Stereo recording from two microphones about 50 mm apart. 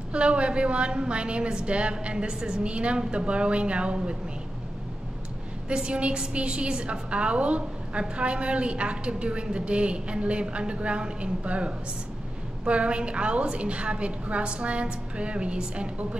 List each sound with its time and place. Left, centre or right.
0.1 s a woman's voice: right
5.7 s a woman's voice: centre